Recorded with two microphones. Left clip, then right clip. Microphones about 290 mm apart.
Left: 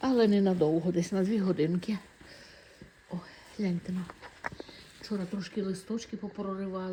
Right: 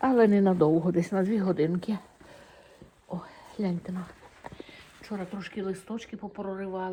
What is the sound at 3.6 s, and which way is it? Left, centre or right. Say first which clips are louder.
Speech: right 2 dB; right.